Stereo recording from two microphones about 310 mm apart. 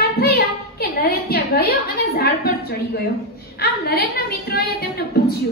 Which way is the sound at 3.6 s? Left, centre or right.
Left.